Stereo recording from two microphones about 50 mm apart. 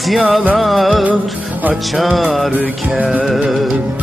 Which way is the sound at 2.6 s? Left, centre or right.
Right.